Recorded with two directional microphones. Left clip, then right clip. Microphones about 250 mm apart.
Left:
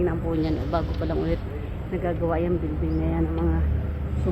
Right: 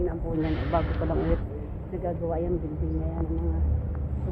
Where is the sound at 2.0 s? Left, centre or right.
Left.